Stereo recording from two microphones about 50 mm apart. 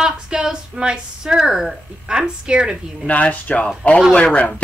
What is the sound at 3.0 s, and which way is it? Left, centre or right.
Speech, left.